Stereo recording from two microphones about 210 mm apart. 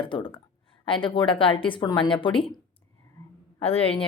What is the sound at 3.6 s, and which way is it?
Speech, 30° left (ahead or behind).